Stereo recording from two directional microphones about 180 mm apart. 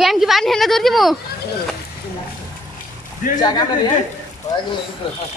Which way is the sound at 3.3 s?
25° left (ahead or behind).